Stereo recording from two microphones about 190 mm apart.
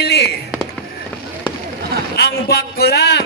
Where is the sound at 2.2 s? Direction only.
55° left (ahead or behind).